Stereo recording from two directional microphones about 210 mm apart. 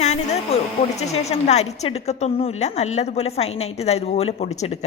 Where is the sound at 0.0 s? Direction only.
30° left (ahead or behind).